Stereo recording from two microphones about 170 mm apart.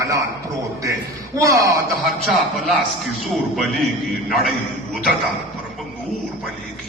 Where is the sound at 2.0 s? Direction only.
Centre (ahead or behind).